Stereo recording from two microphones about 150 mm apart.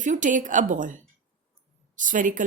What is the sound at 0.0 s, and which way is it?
Speech, 60° right (ahead or behind).